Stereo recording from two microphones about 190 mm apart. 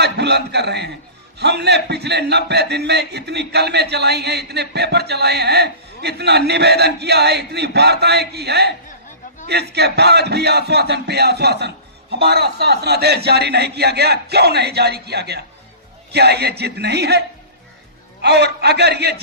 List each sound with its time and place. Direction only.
0.0 s a man's voice: 60° right (ahead or behind)